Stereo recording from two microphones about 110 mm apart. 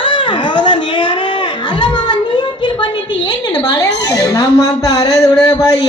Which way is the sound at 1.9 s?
40° left (ahead or behind).